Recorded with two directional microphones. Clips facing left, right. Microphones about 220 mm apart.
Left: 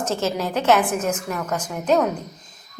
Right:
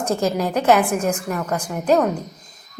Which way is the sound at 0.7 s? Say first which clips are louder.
Right 2 dB; 5° left (ahead or behind).